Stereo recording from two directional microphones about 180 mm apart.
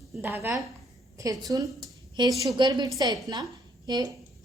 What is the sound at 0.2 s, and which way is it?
A woman's voice, 10° right (ahead or behind).